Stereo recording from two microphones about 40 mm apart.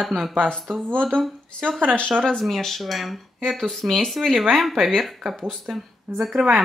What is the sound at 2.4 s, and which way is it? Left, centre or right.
Speech, centre.